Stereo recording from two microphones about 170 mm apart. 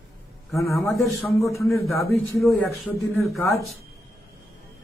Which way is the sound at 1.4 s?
15° left (ahead or behind).